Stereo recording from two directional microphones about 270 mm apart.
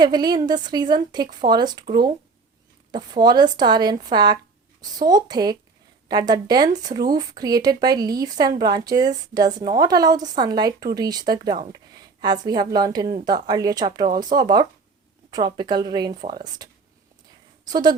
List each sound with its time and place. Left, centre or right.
0.0 s speech: centre